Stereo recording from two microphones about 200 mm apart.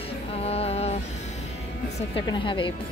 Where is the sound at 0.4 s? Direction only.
30° left (ahead or behind).